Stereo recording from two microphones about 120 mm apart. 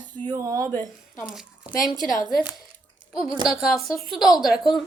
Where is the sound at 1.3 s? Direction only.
5° right (ahead or behind).